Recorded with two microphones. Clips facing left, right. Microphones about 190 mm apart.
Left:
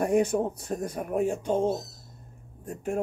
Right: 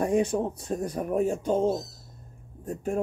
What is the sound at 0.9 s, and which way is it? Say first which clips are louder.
Speech: right 1 dB; 40° right (ahead or behind).